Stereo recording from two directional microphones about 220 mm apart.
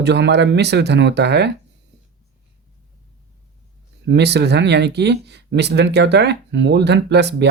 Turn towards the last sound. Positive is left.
turn(degrees=-50)  # may be behind; listen again after turning